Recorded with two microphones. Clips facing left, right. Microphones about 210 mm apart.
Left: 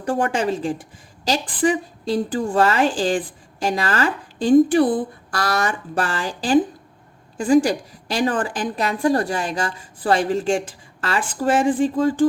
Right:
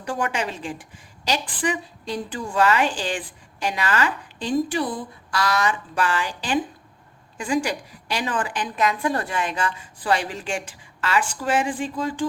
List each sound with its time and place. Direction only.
0.0 s a woman's voice: 45° left (ahead or behind)
4.5 s a woman's voice: 55° left (ahead or behind)
5.9 s a woman's voice: 35° left (ahead or behind)